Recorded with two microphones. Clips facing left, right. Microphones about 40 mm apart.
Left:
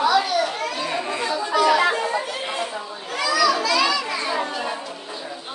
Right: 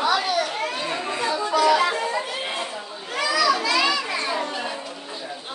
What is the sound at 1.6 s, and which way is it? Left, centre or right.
Chatter, left.